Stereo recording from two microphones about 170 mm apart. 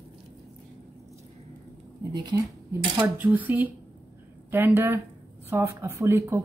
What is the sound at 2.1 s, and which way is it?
Speech, 25° right (ahead or behind).